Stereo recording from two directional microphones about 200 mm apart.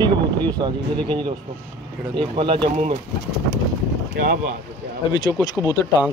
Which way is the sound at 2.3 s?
25° right (ahead or behind).